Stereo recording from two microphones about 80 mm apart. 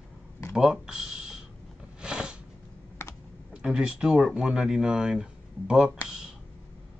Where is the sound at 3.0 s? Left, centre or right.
Left.